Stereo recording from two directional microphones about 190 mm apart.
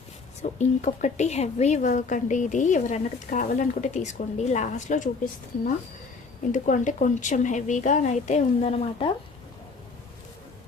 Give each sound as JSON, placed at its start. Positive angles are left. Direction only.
{"t": 0.4, "sound": "a woman's voice", "side_deg": 40}